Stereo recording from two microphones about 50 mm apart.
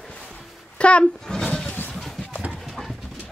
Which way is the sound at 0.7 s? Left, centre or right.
Left.